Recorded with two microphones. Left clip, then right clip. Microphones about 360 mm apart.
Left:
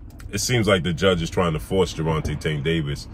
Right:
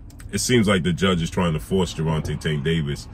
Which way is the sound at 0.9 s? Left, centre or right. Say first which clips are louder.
Left 3 dB; centre.